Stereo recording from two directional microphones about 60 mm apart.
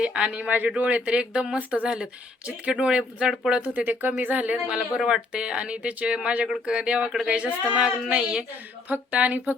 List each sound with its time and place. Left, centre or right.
0.0 s speech: centre
3.8 s speech: right
4.5 s speech: centre
8.9 s speech: right